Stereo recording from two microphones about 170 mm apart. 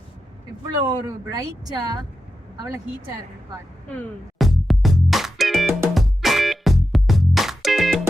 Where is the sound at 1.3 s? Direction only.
20° right (ahead or behind).